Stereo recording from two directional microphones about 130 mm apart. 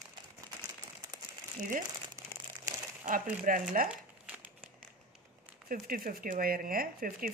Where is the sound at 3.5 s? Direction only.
90° right.